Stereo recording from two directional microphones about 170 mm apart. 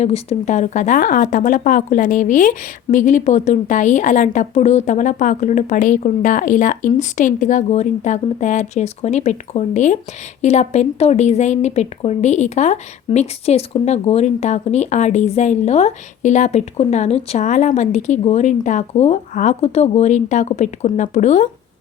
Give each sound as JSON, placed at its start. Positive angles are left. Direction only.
{"t": 0.0, "sound": "speech", "side_deg": 40}